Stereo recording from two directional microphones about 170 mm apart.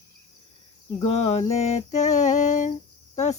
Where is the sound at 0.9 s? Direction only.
40° left (ahead or behind).